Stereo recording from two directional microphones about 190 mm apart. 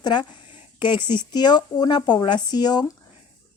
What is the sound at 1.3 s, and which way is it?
Speech, 20° left (ahead or behind).